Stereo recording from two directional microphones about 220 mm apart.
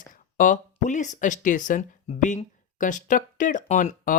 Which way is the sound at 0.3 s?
35° left (ahead or behind).